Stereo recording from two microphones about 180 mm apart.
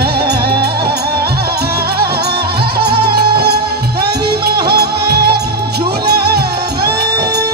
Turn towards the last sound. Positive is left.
turn(degrees=-60)  # may be behind; listen again after turning